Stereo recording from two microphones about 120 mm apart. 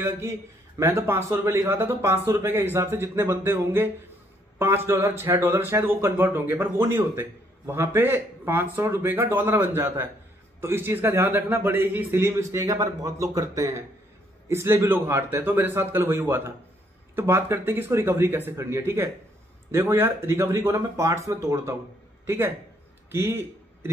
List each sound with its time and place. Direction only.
0.7 s a man's voice: 20° right (ahead or behind)